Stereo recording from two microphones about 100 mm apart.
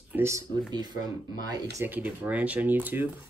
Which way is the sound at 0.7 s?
45° right (ahead or behind).